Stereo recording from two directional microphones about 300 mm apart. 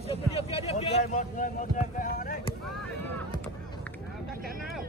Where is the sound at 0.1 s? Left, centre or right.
Centre.